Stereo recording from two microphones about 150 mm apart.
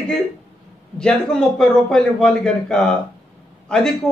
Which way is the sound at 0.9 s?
5° left (ahead or behind).